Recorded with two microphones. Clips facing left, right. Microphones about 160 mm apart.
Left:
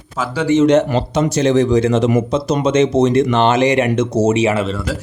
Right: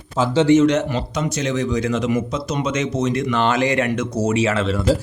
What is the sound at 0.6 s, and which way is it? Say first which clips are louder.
Speech: left 5 dB; 30° left (ahead or behind).